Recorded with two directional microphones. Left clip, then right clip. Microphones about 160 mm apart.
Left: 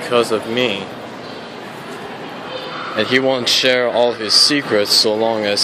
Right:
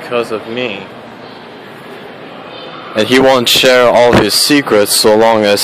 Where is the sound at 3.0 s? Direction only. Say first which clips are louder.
Right 8 dB; 40° right (ahead or behind).